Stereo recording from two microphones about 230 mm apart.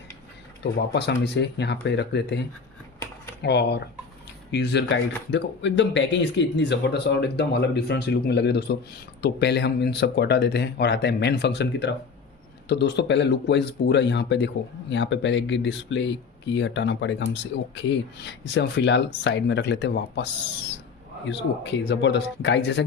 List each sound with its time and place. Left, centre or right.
0.6 s speech: left
18.3 s speech: left
21.2 s speech: left